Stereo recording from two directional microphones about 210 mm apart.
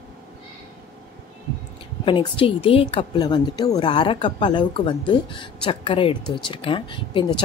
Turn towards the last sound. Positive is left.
turn(degrees=25)  # may be behind; listen again after turning